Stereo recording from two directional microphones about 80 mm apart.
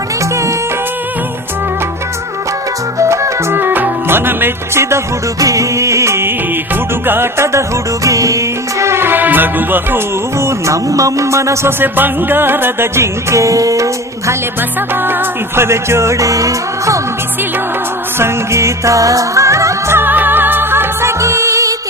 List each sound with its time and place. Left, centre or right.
3.0 s music: right
10.4 s speech: right
11.8 s music: right
15.5 s music: right
18.2 s music: right